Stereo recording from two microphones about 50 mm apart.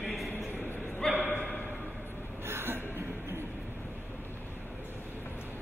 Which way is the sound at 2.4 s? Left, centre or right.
Right.